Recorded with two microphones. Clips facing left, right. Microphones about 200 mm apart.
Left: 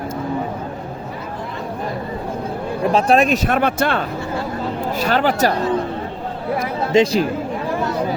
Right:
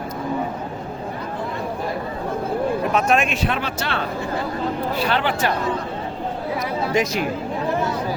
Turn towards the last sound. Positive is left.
turn(degrees=25)  # may be behind; listen again after turning